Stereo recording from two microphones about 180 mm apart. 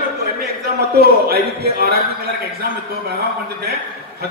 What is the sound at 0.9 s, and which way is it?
A man's voice, 60° right (ahead or behind).